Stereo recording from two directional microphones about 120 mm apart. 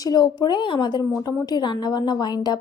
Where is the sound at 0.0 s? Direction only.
35° left (ahead or behind).